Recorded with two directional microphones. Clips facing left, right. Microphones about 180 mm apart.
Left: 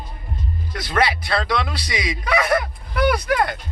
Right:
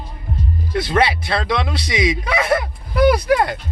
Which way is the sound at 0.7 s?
25° right (ahead or behind).